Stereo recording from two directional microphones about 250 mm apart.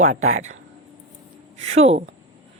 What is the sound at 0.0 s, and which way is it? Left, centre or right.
Speech, right.